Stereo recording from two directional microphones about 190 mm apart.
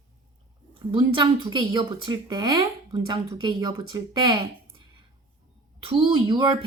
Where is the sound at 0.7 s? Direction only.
25° right (ahead or behind).